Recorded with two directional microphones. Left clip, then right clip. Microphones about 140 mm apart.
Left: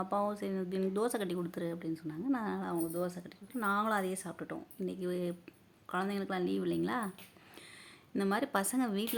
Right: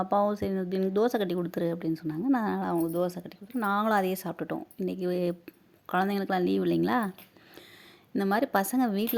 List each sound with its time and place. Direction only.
0.0 s speech: 40° right (ahead or behind)
8.2 s a woman's voice: 40° right (ahead or behind)